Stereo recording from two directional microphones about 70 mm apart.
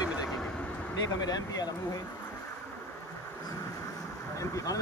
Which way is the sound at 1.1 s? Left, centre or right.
Left.